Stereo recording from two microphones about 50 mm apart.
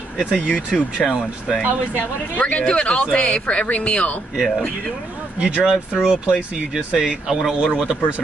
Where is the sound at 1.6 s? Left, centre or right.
Right.